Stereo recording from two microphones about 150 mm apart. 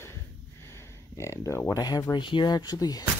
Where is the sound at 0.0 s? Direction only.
15° left (ahead or behind).